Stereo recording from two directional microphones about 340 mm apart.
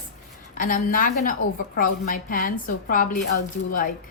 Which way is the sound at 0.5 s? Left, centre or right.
Left.